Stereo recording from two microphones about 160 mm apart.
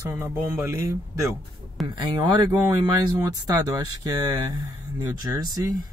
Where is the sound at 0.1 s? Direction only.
15° right (ahead or behind).